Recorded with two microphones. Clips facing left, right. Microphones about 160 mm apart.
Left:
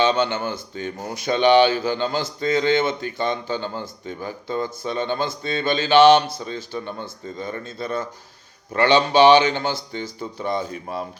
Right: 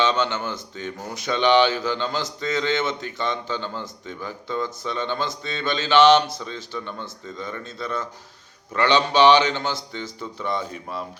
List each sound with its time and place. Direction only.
0.0 s a man's voice: 55° left (ahead or behind)